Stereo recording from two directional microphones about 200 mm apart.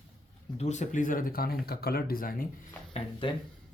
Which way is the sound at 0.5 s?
35° left (ahead or behind).